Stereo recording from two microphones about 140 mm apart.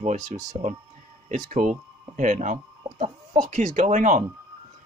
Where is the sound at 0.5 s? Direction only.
45° right (ahead or behind).